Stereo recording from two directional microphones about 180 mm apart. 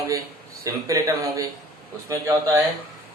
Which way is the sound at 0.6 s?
20° right (ahead or behind).